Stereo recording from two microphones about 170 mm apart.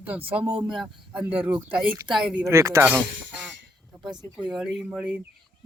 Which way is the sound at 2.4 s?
15° right (ahead or behind).